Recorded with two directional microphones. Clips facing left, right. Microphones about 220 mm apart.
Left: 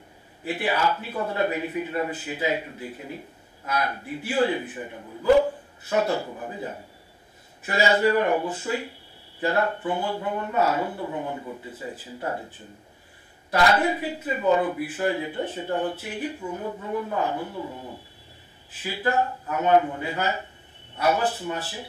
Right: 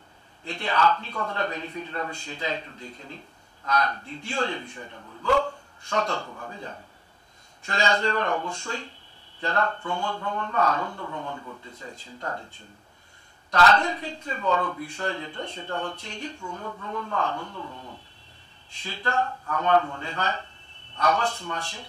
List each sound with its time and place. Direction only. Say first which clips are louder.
0.4 s a man's voice: left 1 dB; 10° left (ahead or behind)
11.7 s a man's voice: left 6 dB; 5° left (ahead or behind)
13.6 s a man's voice: left 1 dB; 10° left (ahead or behind)